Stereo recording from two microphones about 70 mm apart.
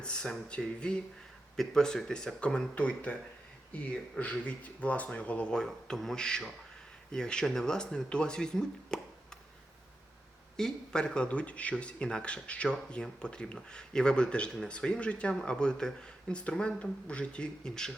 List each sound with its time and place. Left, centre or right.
0.0 s speech: centre
10.6 s speech: centre